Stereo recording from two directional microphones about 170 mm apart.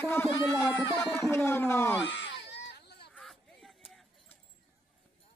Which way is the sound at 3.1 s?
Centre (ahead or behind).